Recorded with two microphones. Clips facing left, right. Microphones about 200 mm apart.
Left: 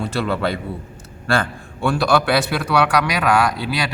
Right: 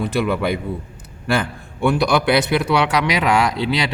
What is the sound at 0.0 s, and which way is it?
A man's voice, 15° right (ahead or behind).